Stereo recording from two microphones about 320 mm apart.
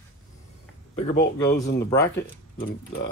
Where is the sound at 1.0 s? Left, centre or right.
Left.